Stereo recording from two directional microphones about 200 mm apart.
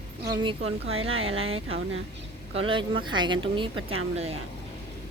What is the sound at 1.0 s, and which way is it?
Speech, 90° right.